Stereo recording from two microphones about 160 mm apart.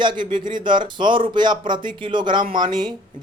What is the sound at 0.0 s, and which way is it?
Speech, 30° right (ahead or behind).